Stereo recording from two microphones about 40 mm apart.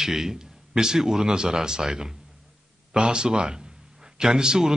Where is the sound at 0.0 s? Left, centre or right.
Centre.